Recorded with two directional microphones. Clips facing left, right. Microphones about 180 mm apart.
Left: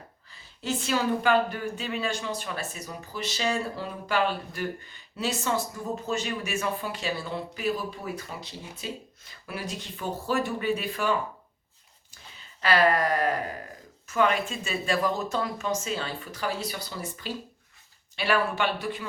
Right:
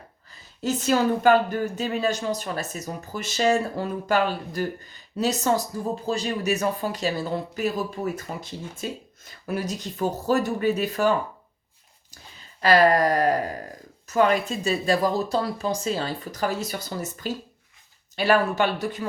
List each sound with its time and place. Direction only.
0.3 s speech: 40° right (ahead or behind)
12.6 s speech: 40° right (ahead or behind)